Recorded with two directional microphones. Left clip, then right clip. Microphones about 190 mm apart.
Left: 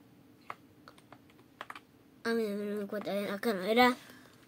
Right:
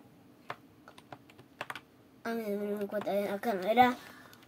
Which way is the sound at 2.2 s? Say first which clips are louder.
Left 2 dB; 35° left (ahead or behind).